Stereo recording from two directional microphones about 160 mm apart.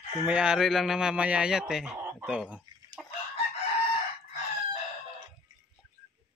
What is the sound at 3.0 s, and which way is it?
Chicken, centre (ahead or behind).